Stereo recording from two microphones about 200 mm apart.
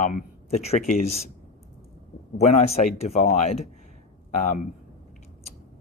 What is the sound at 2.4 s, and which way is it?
Speech, 35° left (ahead or behind).